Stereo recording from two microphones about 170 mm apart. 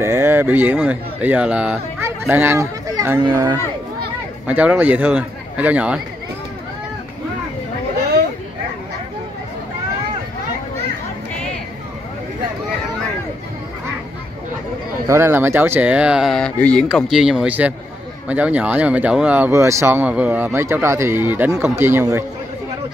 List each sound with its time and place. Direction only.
0.0 s speech: 15° right (ahead or behind)
4.5 s speech: 10° right (ahead or behind)
15.0 s speech: 15° right (ahead or behind)